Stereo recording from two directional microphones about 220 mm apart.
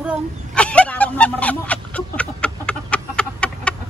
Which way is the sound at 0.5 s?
5° left (ahead or behind).